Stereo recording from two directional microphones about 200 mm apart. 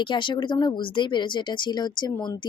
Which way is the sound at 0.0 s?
25° left (ahead or behind).